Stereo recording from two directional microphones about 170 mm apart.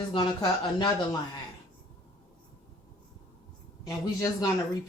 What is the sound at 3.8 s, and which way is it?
Speech, 20° left (ahead or behind).